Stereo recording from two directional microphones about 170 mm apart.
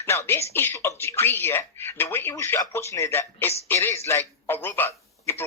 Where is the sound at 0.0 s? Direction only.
15° left (ahead or behind).